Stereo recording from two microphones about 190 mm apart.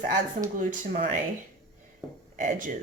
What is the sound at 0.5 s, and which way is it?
Speech, 45° right (ahead or behind).